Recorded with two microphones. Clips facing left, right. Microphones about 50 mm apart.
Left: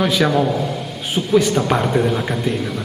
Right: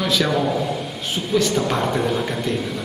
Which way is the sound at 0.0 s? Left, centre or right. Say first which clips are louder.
Left 4 dB; centre.